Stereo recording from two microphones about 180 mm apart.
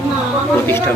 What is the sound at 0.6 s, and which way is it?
Speech, 10° left (ahead or behind).